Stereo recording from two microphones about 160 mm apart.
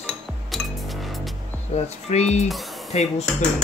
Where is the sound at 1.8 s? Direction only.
40° left (ahead or behind).